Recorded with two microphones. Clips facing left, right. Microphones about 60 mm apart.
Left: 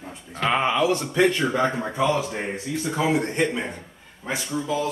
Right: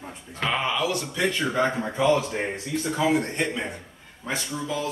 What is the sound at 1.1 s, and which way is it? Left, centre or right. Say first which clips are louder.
Speech: left 6 dB; left.